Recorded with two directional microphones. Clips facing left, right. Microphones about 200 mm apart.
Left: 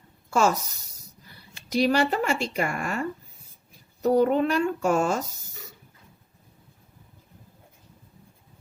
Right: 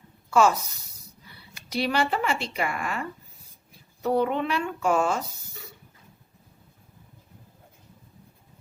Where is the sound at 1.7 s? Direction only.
40° left (ahead or behind).